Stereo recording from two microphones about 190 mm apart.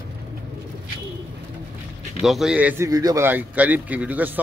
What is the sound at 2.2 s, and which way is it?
Speech, centre (ahead or behind).